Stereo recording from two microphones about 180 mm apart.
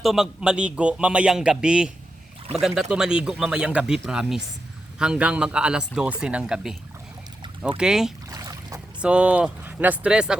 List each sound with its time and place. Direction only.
0.0 s a man's voice: centre (ahead or behind)
7.8 s a man's voice: 5° right (ahead or behind)
8.3 s boat: 20° right (ahead or behind)
9.0 s speech: 5° right (ahead or behind)